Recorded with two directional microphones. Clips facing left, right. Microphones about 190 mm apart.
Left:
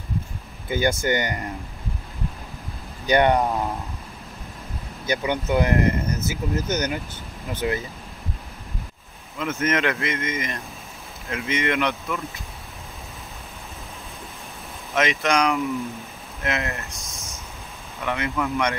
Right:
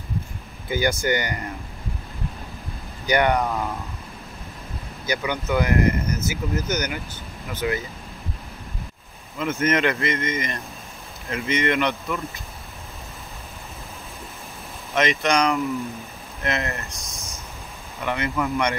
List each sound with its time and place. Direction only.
0.7 s speech: 25° left (ahead or behind)
3.1 s speech: 20° left (ahead or behind)
5.0 s speech: 25° left (ahead or behind)
9.4 s speech: centre (ahead or behind)
15.0 s speech: 5° left (ahead or behind)